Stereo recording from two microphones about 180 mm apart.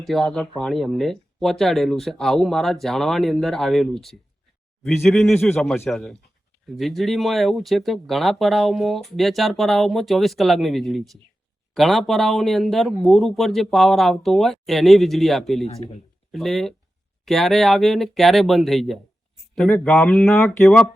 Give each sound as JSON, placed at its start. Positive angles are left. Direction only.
{"t": 0.0, "sound": "speech", "side_deg": 0}
{"t": 15.6, "sound": "speech", "side_deg": 35}
{"t": 16.3, "sound": "speech", "side_deg": 0}